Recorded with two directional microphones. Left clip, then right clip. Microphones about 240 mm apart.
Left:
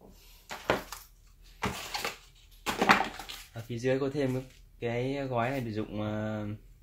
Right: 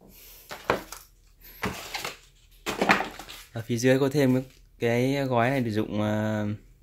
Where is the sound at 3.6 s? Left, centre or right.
Right.